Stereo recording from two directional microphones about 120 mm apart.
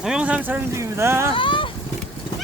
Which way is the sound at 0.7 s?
25° right (ahead or behind).